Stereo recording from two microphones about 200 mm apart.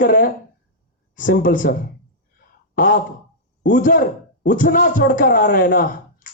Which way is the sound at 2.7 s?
45° left (ahead or behind).